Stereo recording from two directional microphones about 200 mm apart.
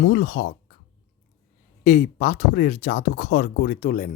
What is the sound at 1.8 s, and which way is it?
Speech, 50° left (ahead or behind).